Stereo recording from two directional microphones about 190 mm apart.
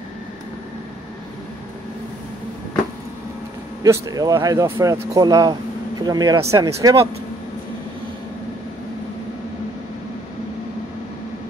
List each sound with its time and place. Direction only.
3.8 s speech: 15° right (ahead or behind)